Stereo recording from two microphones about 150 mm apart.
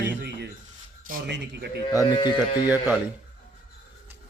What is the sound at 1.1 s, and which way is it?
Speech, 65° right (ahead or behind).